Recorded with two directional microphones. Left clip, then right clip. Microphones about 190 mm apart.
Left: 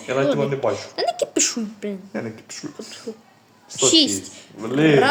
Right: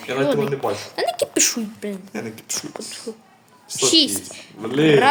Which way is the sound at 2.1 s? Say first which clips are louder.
Right 1 dB; 30° left (ahead or behind).